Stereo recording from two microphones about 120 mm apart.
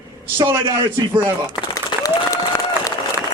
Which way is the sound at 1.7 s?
30° left (ahead or behind).